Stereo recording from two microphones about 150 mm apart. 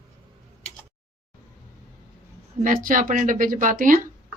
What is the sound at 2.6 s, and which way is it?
Speech, 65° right (ahead or behind).